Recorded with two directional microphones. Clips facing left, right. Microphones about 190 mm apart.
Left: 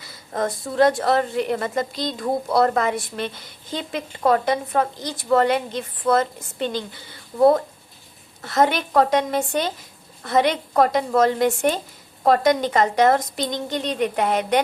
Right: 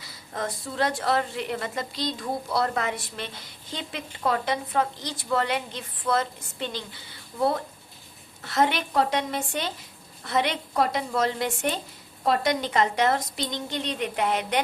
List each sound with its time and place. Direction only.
0.3 s a woman's voice: 50° left (ahead or behind)